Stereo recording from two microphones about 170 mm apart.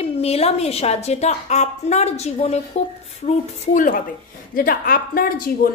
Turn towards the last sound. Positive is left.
turn(degrees=60)  # may be behind; listen again after turning